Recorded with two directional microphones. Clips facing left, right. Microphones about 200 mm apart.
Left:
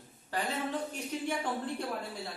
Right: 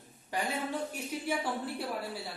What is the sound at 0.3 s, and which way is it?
A man's voice, 10° right (ahead or behind).